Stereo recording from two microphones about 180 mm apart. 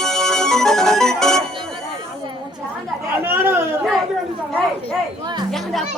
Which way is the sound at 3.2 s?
10° right (ahead or behind).